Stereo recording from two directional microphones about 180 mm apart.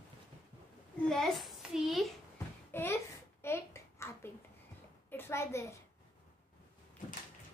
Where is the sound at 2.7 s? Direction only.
15° left (ahead or behind).